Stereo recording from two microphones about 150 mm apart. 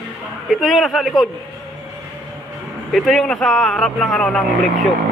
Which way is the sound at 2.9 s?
Centre (ahead or behind).